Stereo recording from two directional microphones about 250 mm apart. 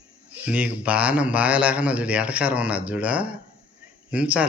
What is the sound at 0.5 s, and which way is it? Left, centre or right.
Speech, centre.